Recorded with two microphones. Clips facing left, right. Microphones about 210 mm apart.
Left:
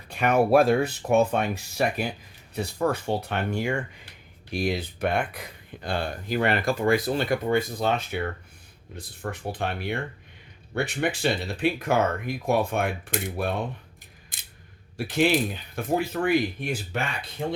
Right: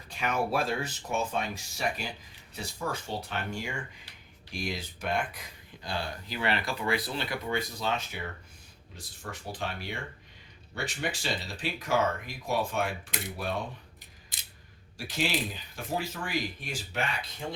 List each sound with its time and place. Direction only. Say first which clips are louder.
0.1 s speech: left 10 dB; 60° left (ahead or behind)
14.3 s a sound: left 2 dB; 50° left (ahead or behind)
14.9 s speech: left 9 dB; 55° left (ahead or behind)